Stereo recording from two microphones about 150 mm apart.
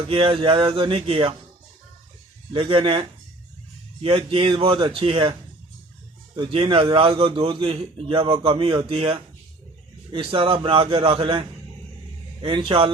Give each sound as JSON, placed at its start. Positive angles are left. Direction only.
{"t": 0.1, "sound": "a man's voice", "side_deg": -35}
{"t": 2.5, "sound": "a man's voice", "side_deg": -35}